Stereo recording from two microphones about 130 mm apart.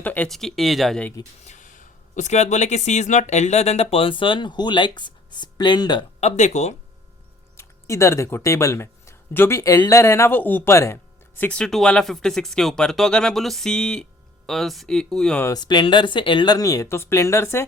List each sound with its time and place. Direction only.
0.0 s speech: 10° left (ahead or behind)
1.5 s speech: 75° left (ahead or behind); by 6.1 s 35° left (ahead or behind)
6.1 s speech: 60° left (ahead or behind)
7.5 s speech: 20° left (ahead or behind); by 15.4 s 5° left (ahead or behind)
15.5 s speech: 35° left (ahead or behind); by 17.7 s 20° left (ahead or behind)